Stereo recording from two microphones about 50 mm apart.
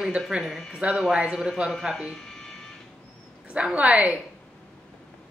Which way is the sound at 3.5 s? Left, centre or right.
Right.